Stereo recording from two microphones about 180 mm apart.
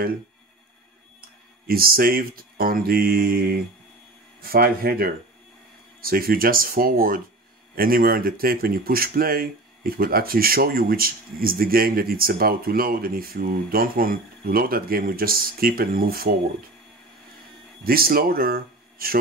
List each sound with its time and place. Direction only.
1.7 s speech: 55° right (ahead or behind)
17.8 s speech: 55° right (ahead or behind)